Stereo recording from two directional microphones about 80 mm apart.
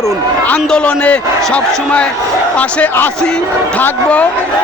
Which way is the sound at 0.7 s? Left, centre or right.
Centre.